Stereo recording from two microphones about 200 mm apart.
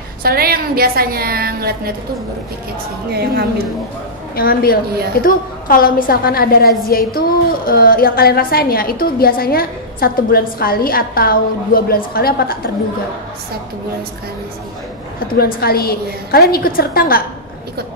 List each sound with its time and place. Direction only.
0.2 s a woman's voice: 50° right (ahead or behind)
3.1 s a woman's voice: 55° right (ahead or behind)
4.4 s a woman's voice: 50° left (ahead or behind)
4.8 s a woman's voice: 50° right (ahead or behind)
5.2 s a woman's voice: 45° left (ahead or behind)
15.1 s a woman's voice: 50° left (ahead or behind)